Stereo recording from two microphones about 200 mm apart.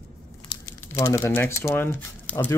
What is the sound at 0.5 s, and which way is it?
Crumpling, 25° left (ahead or behind).